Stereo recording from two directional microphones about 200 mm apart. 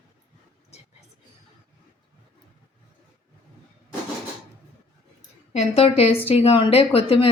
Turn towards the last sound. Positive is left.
turn(degrees=30)  # may be behind; listen again after turning